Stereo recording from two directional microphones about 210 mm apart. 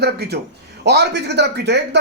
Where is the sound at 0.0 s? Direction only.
50° right (ahead or behind).